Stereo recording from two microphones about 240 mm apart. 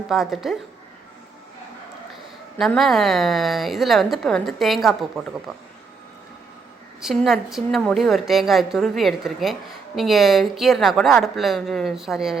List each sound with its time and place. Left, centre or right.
0.1 s a woman's voice: centre
2.6 s a woman's voice: centre
7.0 s a woman's voice: centre